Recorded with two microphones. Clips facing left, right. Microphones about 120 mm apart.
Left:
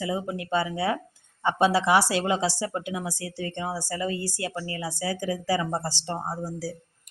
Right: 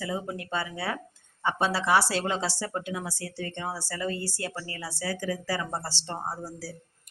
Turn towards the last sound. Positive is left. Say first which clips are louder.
# left 4 dB
turn(degrees=15)  # may be behind; listen again after turning